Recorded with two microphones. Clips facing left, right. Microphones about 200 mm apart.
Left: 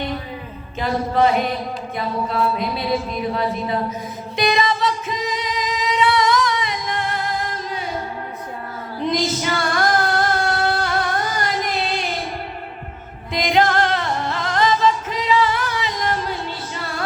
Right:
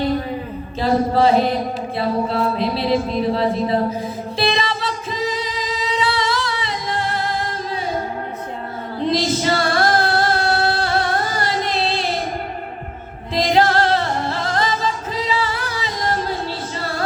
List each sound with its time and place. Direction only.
0.8 s music: 35° right (ahead or behind)
9.0 s singing: 30° right (ahead or behind)
13.3 s music: 35° right (ahead or behind)